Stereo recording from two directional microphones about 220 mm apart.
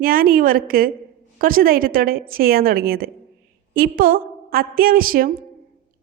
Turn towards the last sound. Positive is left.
turn(degrees=-40)  # may be behind; listen again after turning